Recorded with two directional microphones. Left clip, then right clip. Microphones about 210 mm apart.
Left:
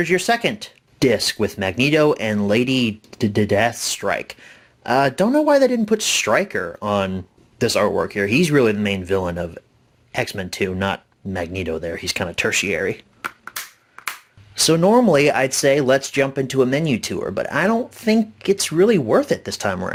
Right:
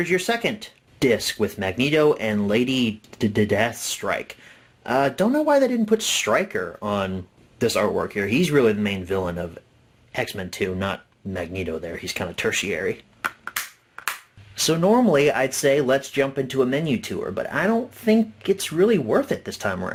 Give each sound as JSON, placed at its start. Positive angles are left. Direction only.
{"t": 0.0, "sound": "speech", "side_deg": 40}
{"t": 14.5, "sound": "speech", "side_deg": 35}